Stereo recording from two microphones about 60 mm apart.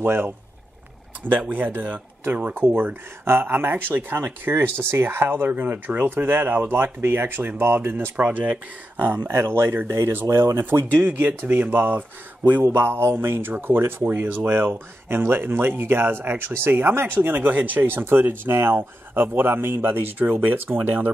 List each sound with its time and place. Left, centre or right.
0.0 s speech: right
1.5 s speech: right
2.6 s speech: right
8.2 s speech: right
8.9 s speech: right
12.6 s speech: right